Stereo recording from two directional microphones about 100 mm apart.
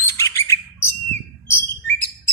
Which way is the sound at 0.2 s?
25° left (ahead or behind).